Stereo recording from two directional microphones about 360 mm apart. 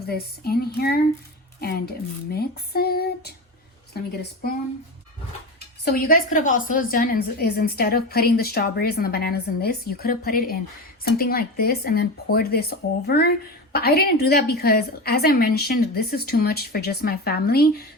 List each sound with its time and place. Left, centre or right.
0.1 s a woman's voice: left
5.8 s a woman's voice: left